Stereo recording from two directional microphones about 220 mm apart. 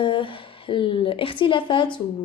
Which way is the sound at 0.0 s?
20° left (ahead or behind).